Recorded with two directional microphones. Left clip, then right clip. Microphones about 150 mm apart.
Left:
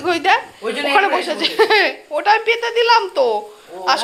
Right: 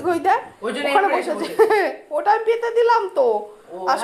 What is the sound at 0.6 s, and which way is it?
Speech, 10° left (ahead or behind).